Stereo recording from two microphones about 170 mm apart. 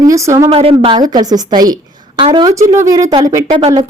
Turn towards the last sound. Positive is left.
turn(degrees=-30)  # may be behind; listen again after turning